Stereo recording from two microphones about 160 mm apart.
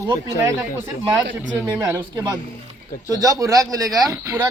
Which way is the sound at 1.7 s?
25° right (ahead or behind).